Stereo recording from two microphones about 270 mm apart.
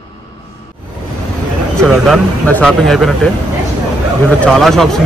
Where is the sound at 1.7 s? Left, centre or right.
Centre.